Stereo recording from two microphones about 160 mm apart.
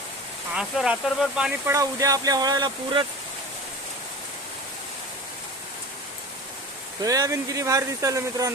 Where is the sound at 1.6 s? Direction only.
20° right (ahead or behind).